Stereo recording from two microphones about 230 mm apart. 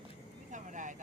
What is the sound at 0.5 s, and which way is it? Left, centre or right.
Vehicle, right.